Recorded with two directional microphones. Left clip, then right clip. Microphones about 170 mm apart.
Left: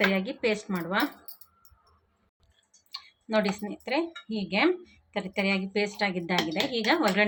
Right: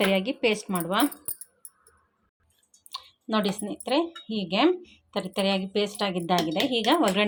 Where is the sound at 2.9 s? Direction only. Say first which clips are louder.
Right 1 dB; 40° right (ahead or behind).